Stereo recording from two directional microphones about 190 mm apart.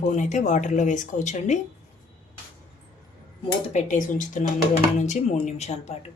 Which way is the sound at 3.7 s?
40° left (ahead or behind).